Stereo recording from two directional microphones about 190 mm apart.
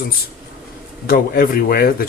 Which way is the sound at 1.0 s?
50° left (ahead or behind).